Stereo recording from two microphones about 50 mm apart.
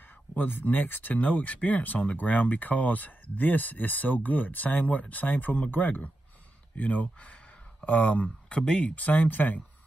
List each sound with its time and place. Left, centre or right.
0.4 s speech: left